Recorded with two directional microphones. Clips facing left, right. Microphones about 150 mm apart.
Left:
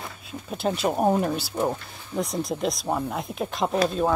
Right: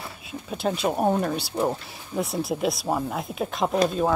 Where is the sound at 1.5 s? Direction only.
5° right (ahead or behind).